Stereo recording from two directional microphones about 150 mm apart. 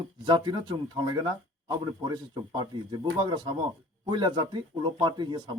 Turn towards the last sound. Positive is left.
turn(degrees=-30)  # may be behind; listen again after turning